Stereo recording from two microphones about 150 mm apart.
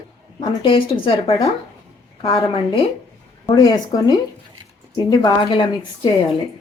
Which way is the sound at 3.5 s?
25° left (ahead or behind).